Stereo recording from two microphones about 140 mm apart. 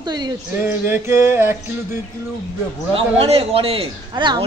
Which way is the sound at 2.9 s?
45° right (ahead or behind).